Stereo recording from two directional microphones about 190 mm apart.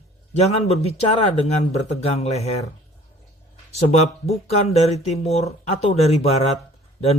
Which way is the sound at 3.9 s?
35° left (ahead or behind).